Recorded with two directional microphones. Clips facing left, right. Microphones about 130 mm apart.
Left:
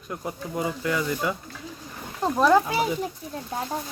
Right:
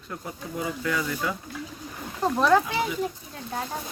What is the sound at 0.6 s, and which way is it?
Speech, 15° left (ahead or behind).